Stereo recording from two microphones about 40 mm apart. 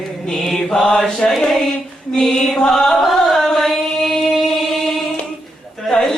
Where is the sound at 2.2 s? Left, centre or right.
Centre.